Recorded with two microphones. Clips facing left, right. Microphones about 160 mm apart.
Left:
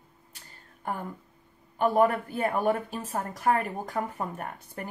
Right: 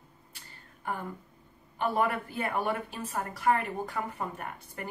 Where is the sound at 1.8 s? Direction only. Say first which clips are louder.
Left 6 dB; 40° left (ahead or behind).